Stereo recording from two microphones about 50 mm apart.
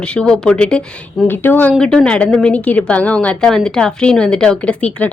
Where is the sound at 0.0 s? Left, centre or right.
Centre.